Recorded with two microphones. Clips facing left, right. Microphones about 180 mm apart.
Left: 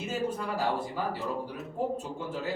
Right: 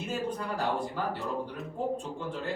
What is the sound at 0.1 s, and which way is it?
A man's voice, 5° left (ahead or behind).